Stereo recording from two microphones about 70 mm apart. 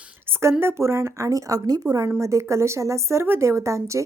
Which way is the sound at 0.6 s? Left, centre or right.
Right.